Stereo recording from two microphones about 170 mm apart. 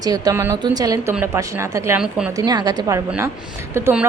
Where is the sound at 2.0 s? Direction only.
5° right (ahead or behind).